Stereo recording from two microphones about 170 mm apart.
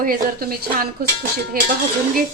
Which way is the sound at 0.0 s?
60° right (ahead or behind).